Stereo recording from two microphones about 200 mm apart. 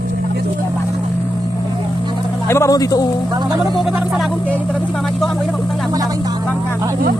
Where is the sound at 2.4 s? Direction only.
15° left (ahead or behind).